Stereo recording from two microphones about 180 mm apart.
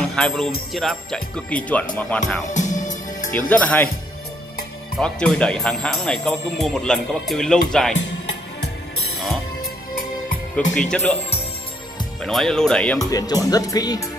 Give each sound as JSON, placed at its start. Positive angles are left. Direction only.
{"t": 0.1, "sound": "speech", "side_deg": 5}
{"t": 2.5, "sound": "music", "side_deg": 45}
{"t": 3.3, "sound": "speech", "side_deg": 10}
{"t": 4.9, "sound": "speech", "side_deg": 5}
{"t": 10.7, "sound": "speech", "side_deg": 5}
{"t": 12.2, "sound": "speech", "side_deg": 0}
{"t": 13.0, "sound": "speech", "side_deg": 20}